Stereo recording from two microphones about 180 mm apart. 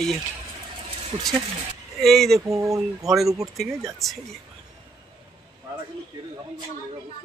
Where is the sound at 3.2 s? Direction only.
15° right (ahead or behind).